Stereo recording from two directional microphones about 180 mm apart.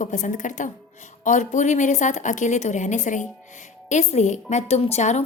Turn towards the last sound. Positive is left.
turn(degrees=40)  # may be behind; listen again after turning